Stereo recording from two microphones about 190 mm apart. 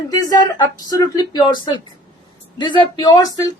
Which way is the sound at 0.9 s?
20° left (ahead or behind).